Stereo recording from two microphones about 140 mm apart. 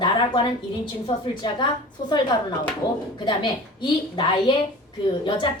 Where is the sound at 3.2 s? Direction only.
35° left (ahead or behind).